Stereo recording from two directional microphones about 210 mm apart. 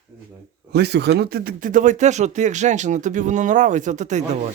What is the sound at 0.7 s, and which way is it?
Speech, 50° right (ahead or behind).